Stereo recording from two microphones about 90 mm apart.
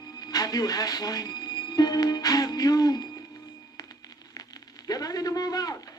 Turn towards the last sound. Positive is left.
turn(degrees=45)  # may be behind; listen again after turning